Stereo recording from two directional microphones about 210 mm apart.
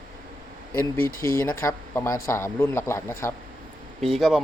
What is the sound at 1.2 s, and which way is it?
Speech, 15° left (ahead or behind).